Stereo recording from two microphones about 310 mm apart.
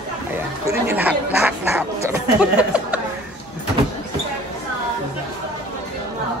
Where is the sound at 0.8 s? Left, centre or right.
Centre.